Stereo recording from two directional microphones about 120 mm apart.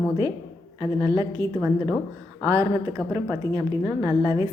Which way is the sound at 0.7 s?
30° right (ahead or behind).